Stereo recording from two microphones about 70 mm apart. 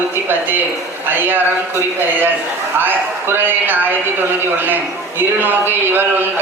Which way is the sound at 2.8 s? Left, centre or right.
Right.